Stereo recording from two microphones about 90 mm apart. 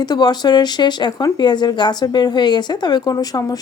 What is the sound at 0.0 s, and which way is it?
Speech, 50° left (ahead or behind).